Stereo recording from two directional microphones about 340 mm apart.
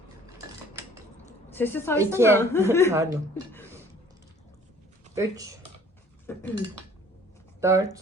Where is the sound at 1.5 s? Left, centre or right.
Centre.